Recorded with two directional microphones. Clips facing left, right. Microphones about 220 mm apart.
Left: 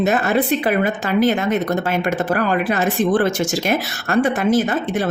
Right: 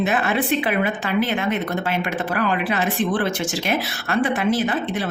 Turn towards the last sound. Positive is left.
turn(degrees=45)  # may be behind; listen again after turning